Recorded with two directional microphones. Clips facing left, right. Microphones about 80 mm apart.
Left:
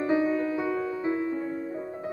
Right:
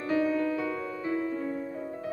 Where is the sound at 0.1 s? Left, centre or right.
Left.